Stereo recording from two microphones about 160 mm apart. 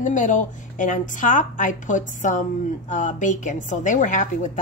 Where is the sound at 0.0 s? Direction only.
50° left (ahead or behind).